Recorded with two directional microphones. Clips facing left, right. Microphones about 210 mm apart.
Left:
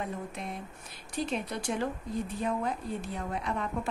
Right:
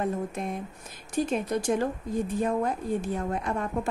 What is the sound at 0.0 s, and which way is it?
Speech, 45° right (ahead or behind).